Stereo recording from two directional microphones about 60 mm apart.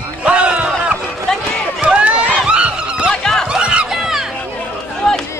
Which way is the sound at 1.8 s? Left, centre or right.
Centre.